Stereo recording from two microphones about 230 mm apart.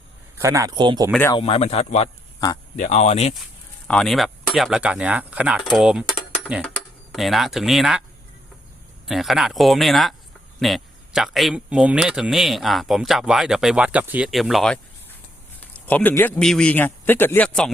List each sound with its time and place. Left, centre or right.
0.3 s speech: centre
1.1 s speech: centre
1.4 s speech: left
3.8 s speech: centre
9.0 s a man's voice: centre